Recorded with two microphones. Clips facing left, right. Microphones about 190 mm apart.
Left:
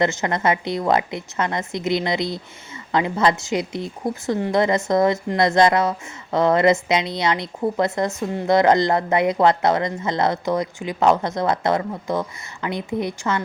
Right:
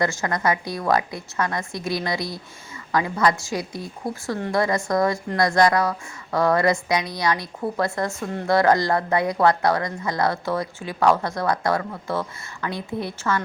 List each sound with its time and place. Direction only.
0.0 s a woman's voice: 20° left (ahead or behind)